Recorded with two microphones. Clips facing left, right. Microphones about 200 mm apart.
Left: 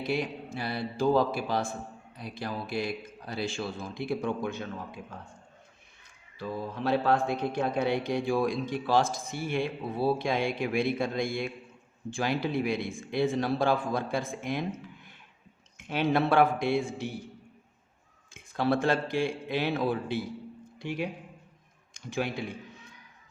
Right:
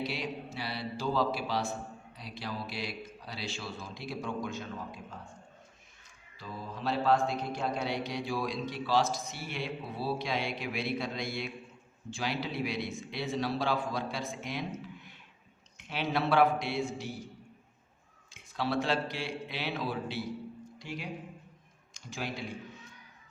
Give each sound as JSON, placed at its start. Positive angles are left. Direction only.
{"t": 0.0, "sound": "mantra", "side_deg": 50}
{"t": 6.4, "sound": "mantra", "side_deg": 60}
{"t": 18.3, "sound": "mantra", "side_deg": 50}
{"t": 20.7, "sound": "speech", "side_deg": 60}